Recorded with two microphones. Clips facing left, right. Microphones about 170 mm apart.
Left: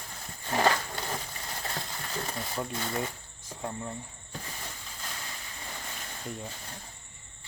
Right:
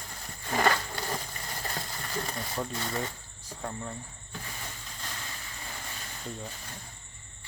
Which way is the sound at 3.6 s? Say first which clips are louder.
Left 1 dB; 15° left (ahead or behind).